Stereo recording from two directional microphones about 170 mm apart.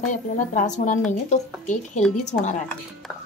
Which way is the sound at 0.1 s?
45° left (ahead or behind).